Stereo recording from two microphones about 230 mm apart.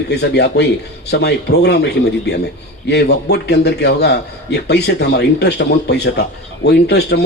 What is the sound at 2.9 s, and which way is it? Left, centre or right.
A man's voice, left.